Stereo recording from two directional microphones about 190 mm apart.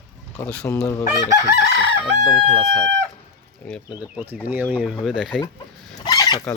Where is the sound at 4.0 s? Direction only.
10° right (ahead or behind).